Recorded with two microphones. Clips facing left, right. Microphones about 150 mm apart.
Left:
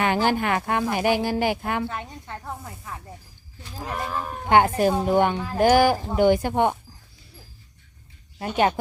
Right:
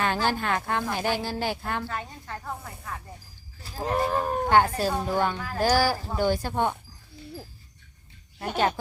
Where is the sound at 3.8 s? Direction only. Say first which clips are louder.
Right 5 dB; 35° right (ahead or behind).